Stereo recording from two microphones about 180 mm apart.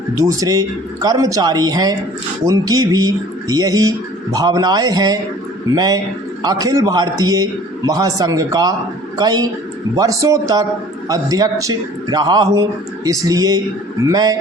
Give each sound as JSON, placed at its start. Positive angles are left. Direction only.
{"t": 0.3, "sound": "speech", "side_deg": -20}